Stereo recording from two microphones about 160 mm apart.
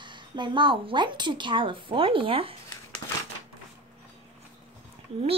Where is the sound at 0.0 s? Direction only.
30° right (ahead or behind).